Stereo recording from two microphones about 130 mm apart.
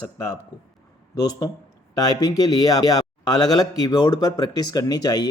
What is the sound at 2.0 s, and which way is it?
A man's voice, 30° left (ahead or behind).